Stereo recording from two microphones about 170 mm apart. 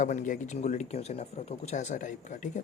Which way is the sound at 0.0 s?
50° left (ahead or behind).